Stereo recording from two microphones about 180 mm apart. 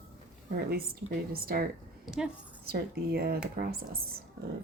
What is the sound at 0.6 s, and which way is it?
A woman's voice, 60° right (ahead or behind).